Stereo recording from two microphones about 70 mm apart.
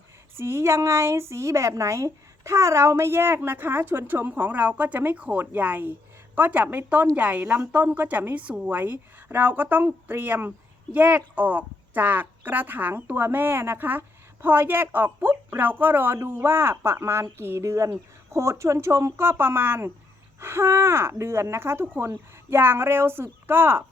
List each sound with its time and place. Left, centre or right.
0.3 s a woman's voice: right